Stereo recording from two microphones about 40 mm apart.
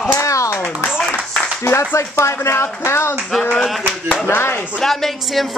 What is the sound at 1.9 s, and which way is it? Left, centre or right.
Speech, left.